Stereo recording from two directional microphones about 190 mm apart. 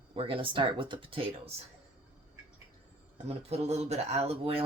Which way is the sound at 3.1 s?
35° right (ahead or behind).